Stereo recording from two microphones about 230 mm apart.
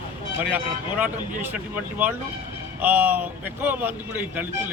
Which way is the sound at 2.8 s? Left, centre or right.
Centre.